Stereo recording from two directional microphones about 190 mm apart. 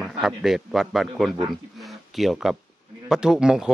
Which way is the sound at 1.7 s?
Centre (ahead or behind).